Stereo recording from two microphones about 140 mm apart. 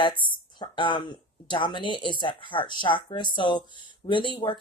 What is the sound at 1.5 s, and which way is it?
Speech, 35° left (ahead or behind).